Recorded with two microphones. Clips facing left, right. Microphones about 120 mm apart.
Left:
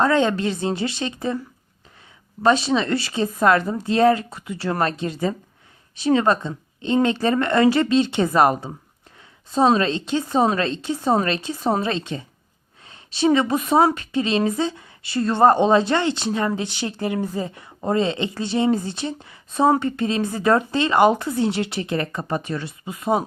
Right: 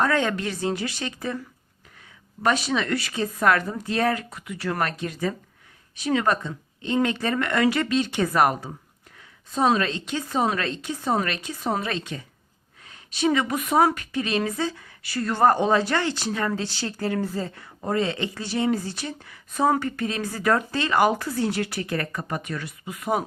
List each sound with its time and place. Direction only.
0.0 s speech: 25° left (ahead or behind)
2.4 s speech: 25° left (ahead or behind)